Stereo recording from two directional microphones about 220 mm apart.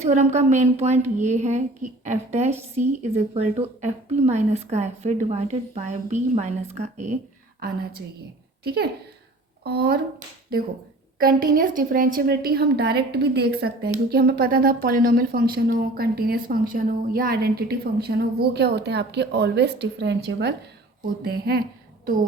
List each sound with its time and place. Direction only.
0.0 s a woman's voice: 30° right (ahead or behind)
8.6 s a woman's voice: 45° right (ahead or behind)